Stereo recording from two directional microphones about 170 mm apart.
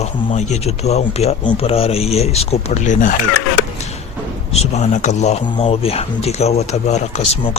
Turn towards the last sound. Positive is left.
turn(degrees=40)  # may be behind; listen again after turning